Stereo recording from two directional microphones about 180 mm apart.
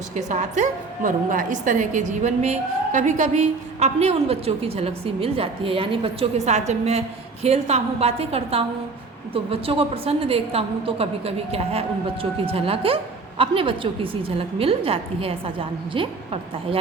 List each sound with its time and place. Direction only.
0.2 s a woman's voice: 40° right (ahead or behind)